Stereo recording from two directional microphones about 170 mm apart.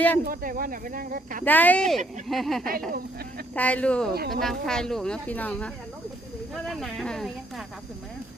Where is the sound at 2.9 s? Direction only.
65° right (ahead or behind).